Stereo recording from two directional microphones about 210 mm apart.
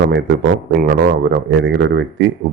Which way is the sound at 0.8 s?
55° right (ahead or behind).